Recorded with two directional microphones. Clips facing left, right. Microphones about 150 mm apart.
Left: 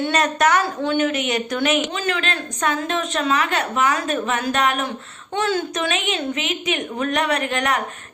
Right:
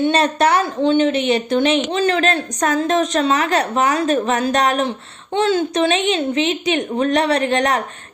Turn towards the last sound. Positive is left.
turn(degrees=-35)  # may be behind; listen again after turning